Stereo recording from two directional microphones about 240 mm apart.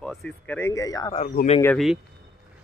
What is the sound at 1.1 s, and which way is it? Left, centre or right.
Speech, left.